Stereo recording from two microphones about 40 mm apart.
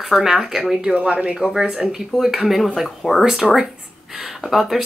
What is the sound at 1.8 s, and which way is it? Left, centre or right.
Speech, centre.